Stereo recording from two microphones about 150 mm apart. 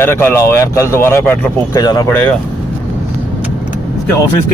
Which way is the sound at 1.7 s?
25° left (ahead or behind).